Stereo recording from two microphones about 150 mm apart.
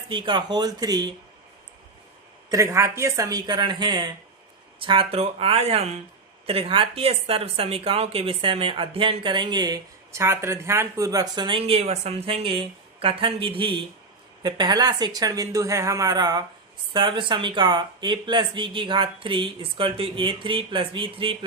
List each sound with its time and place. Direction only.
0.1 s speech: 30° right (ahead or behind)
2.5 s speech: 20° right (ahead or behind)